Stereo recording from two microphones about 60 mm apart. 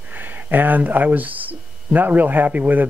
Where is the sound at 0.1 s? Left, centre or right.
Right.